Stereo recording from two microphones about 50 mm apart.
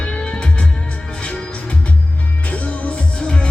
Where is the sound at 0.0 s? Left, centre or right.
Left.